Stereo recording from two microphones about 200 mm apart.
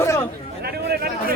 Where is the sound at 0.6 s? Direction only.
50° right (ahead or behind).